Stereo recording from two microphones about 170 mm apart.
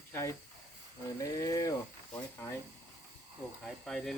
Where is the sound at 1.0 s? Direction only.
20° left (ahead or behind).